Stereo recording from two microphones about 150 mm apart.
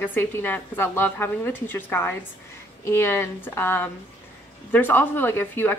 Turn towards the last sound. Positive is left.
turn(degrees=15)  # may be behind; listen again after turning